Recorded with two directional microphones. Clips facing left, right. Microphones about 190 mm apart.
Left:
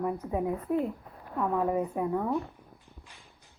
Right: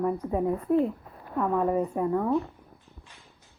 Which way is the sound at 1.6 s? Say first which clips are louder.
Right 3 dB; 5° left (ahead or behind).